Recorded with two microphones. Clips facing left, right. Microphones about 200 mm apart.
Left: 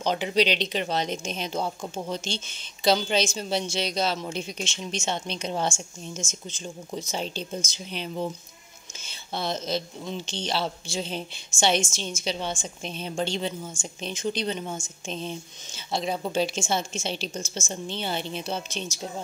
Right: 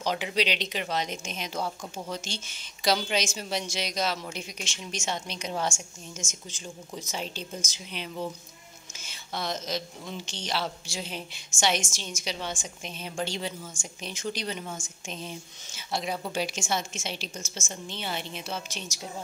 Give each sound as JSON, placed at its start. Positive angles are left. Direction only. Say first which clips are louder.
{"t": 0.0, "sound": "speech", "louder": "left 5 dB", "side_deg": 30}